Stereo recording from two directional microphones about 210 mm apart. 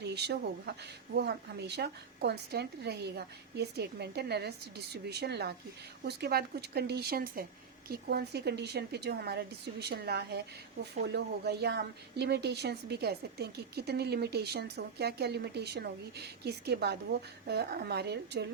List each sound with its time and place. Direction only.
0.0 s a woman's voice: 55° right (ahead or behind)